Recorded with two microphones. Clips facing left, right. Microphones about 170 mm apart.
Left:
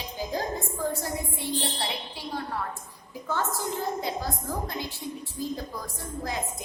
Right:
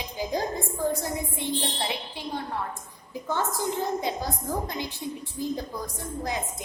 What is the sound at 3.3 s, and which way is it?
A woman's voice, 15° right (ahead or behind).